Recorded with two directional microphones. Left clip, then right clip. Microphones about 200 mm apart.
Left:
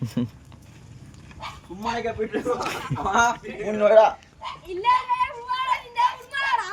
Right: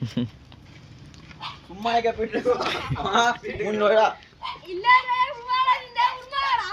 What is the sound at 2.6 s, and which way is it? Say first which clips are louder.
Speech: right 2 dB; 5° left (ahead or behind).